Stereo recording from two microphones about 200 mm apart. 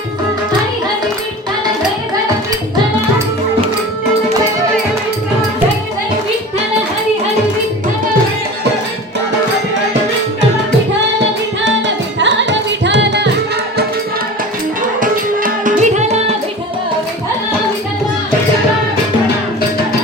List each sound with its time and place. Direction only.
12.2 s music: 65° right (ahead or behind)
15.0 s music: 40° right (ahead or behind)